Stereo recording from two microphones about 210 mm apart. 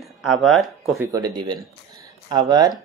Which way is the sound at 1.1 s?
20° right (ahead or behind).